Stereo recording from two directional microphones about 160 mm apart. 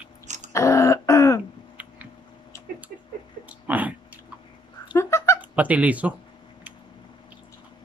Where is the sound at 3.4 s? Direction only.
10° right (ahead or behind).